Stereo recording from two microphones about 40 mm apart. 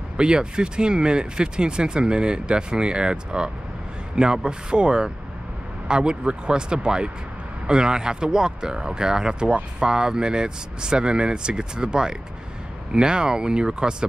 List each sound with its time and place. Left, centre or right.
0.2 s speech: right